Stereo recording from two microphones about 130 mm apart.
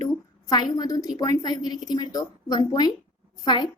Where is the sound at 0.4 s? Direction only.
30° left (ahead or behind).